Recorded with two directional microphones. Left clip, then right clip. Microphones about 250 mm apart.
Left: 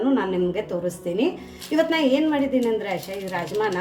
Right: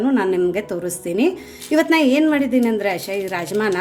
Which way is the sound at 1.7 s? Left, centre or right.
Right.